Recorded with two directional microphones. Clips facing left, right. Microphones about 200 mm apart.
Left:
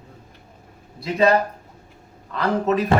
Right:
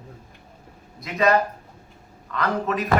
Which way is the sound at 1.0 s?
30° left (ahead or behind).